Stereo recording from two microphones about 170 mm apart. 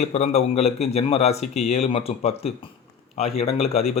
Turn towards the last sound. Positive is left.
turn(degrees=35)  # may be behind; listen again after turning